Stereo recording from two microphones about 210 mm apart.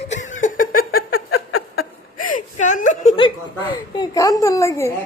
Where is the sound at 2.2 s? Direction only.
35° left (ahead or behind).